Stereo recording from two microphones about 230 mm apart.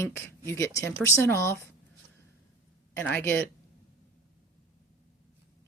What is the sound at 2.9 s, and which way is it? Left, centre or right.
Speech, centre.